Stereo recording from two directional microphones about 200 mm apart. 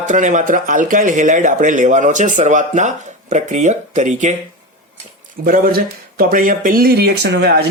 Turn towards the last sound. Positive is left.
turn(degrees=-55)  # may be behind; listen again after turning